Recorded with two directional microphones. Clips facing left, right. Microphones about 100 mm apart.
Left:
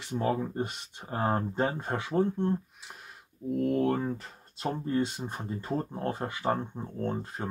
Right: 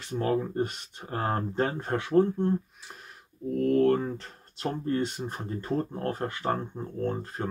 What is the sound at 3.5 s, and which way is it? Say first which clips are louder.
Speech: right 4 dB; 10° left (ahead or behind).